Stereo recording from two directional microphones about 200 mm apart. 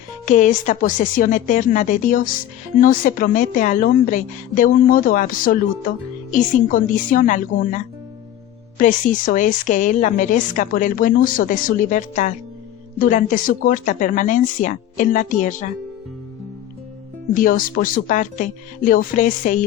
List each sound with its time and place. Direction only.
0.3 s a woman's voice: 40° left (ahead or behind)
8.8 s a woman's voice: 40° left (ahead or behind)
17.3 s a woman's voice: 45° left (ahead or behind)